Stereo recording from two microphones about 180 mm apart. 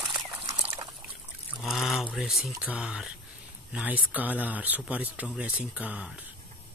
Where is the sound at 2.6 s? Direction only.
5° right (ahead or behind).